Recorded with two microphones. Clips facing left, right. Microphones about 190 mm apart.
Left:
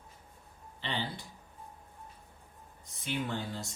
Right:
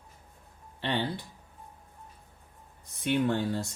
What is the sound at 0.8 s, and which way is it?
Speech, 60° right (ahead or behind).